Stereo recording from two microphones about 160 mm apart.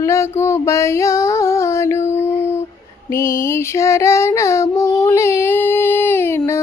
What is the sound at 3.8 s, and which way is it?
Child singing, 15° left (ahead or behind).